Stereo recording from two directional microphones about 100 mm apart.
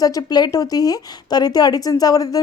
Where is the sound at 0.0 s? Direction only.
40° left (ahead or behind).